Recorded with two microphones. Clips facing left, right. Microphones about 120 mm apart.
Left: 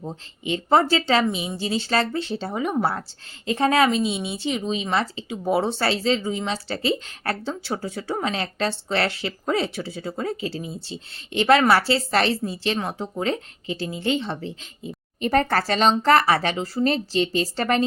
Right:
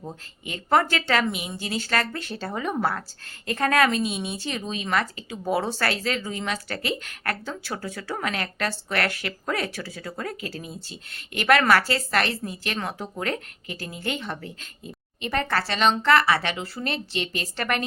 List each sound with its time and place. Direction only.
0.4 s speech: 25° left (ahead or behind)
15.2 s speech: 40° left (ahead or behind)